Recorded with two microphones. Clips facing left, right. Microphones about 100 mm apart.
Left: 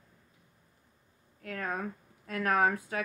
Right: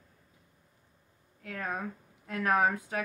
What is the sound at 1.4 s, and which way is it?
Speech, 20° right (ahead or behind).